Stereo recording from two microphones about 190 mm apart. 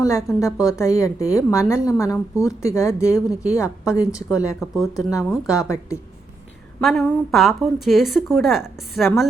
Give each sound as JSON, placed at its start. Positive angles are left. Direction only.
{"t": 0.0, "sound": "a woman's voice", "side_deg": 15}
{"t": 4.6, "sound": "a woman's voice", "side_deg": 0}
{"t": 5.5, "sound": "a woman's voice", "side_deg": 15}
{"t": 6.7, "sound": "a woman's voice", "side_deg": 0}